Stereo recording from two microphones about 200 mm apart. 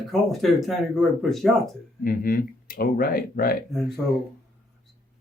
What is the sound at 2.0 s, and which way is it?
Speech, 45° left (ahead or behind).